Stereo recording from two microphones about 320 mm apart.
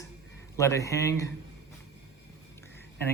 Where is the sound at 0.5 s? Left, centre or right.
Centre.